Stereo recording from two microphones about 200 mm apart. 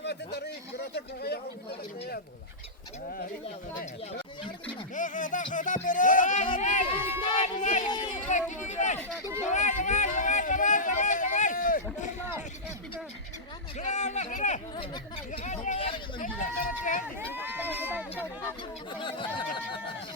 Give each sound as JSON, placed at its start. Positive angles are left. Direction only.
{"t": 0.0, "sound": "a sound", "side_deg": 55}
{"t": 0.9, "sound": "speech", "side_deg": 55}
{"t": 4.9, "sound": "speech", "side_deg": 40}
{"t": 7.9, "sound": "speech", "side_deg": 20}
{"t": 8.1, "sound": "speech", "side_deg": 40}
{"t": 9.4, "sound": "a sound", "side_deg": 35}
{"t": 13.7, "sound": "speech", "side_deg": 35}
{"t": 15.6, "sound": "speech", "side_deg": 30}
{"t": 17.2, "sound": "speech", "side_deg": -10}
{"t": 18.9, "sound": "speech", "side_deg": 25}